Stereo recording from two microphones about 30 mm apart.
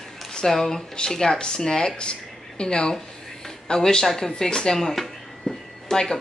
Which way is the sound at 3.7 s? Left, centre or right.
Centre.